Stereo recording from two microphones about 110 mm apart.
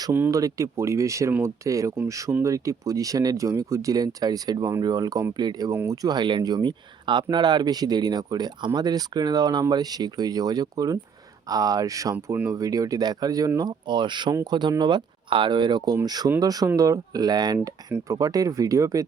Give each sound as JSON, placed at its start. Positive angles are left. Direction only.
{"t": 0.3, "sound": "speech", "side_deg": -30}